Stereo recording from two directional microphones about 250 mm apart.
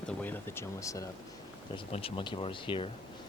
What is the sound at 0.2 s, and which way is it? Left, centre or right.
Speech, centre.